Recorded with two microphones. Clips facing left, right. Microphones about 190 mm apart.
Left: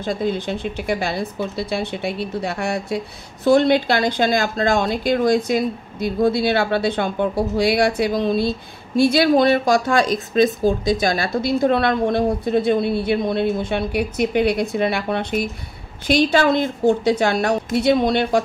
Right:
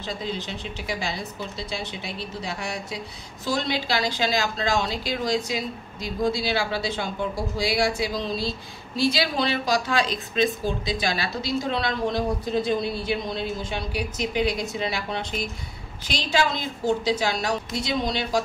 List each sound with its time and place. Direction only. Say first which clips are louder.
0.0 s speech: left 9 dB; 50° left (ahead or behind)